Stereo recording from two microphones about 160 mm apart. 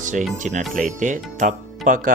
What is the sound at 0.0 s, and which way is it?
Music, 50° right (ahead or behind).